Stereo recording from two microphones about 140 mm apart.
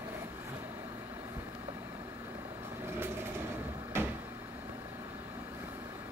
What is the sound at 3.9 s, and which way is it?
Cupboard open or close, 20° right (ahead or behind).